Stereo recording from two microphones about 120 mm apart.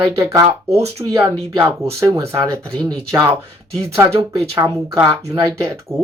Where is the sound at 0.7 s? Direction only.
60° right (ahead or behind).